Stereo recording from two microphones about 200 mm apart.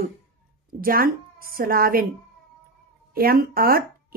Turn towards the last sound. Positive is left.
turn(degrees=-45)  # may be behind; listen again after turning